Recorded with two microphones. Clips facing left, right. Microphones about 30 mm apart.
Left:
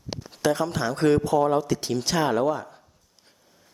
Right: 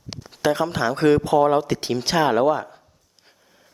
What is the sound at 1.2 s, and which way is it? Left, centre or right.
Speech, right.